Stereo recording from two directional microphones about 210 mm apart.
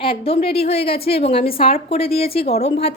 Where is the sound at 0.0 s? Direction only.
25° left (ahead or behind).